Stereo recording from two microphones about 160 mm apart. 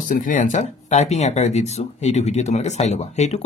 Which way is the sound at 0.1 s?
55° left (ahead or behind).